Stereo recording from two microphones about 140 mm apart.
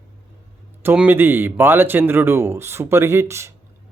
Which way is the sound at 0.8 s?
15° right (ahead or behind).